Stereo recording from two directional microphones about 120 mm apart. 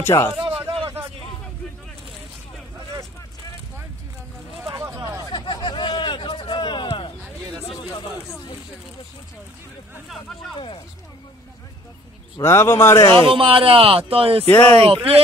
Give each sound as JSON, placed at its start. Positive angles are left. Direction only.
{"t": 0.0, "sound": "a man's voice", "side_deg": 20}
{"t": 4.7, "sound": "a sound", "side_deg": -25}
{"t": 5.3, "sound": "a sound", "side_deg": 40}
{"t": 12.4, "sound": "a man's voice", "side_deg": 25}
{"t": 13.1, "sound": "speech", "side_deg": -45}
{"t": 14.4, "sound": "speech", "side_deg": 15}
{"t": 14.8, "sound": "speech", "side_deg": -55}